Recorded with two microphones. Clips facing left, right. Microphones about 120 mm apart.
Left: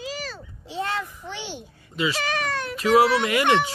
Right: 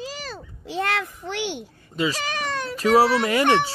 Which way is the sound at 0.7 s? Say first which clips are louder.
Right 3 dB; 70° right (ahead or behind).